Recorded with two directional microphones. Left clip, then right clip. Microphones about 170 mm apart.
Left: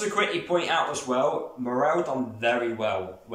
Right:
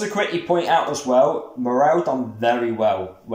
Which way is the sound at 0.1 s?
35° right (ahead or behind).